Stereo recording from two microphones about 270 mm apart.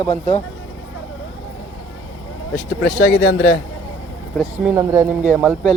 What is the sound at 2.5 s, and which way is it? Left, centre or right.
A man's voice, left.